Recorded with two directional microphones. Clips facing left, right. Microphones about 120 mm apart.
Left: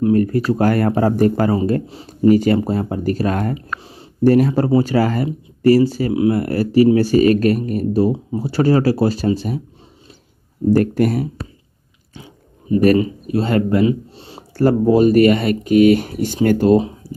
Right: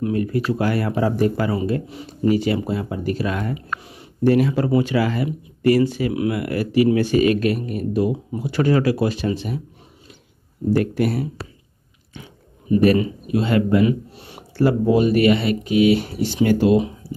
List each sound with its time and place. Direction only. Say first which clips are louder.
0.1 s speech: left 6 dB; 45° left (ahead or behind)
2.3 s speech: left 5 dB; 45° left (ahead or behind)
10.7 s speech: left 4 dB; 45° left (ahead or behind)
12.8 s speech: left 4 dB; 40° left (ahead or behind)
13.8 s speech: left 2 dB; 30° left (ahead or behind)
14.6 s speech: left 4 dB; 40° left (ahead or behind)